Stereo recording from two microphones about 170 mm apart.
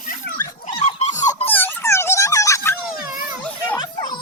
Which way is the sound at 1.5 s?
10° left (ahead or behind).